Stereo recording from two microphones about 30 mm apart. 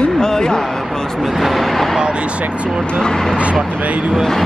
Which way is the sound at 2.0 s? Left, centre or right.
Right.